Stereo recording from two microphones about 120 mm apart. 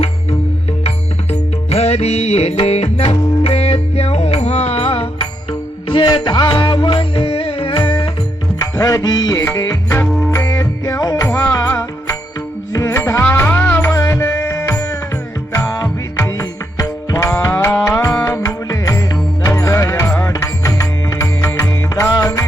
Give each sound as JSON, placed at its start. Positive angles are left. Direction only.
{"t": 0.9, "sound": "music", "side_deg": 60}
{"t": 8.6, "sound": "music", "side_deg": 30}
{"t": 10.1, "sound": "music", "side_deg": 0}
{"t": 10.3, "sound": "music", "side_deg": 25}
{"t": 12.7, "sound": "music", "side_deg": 25}
{"t": 13.2, "sound": "music", "side_deg": 15}